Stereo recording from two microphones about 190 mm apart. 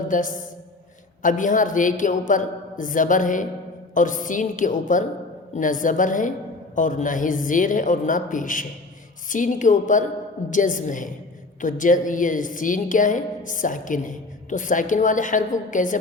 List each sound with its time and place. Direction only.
0.1 s a woman's voice: 45° left (ahead or behind)